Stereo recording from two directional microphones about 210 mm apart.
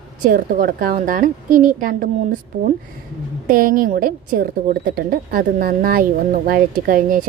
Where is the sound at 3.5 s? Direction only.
40° right (ahead or behind).